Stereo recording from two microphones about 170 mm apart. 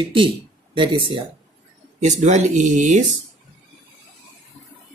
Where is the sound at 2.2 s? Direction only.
45° right (ahead or behind).